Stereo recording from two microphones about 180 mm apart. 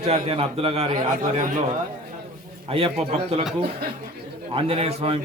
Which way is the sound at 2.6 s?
30° right (ahead or behind).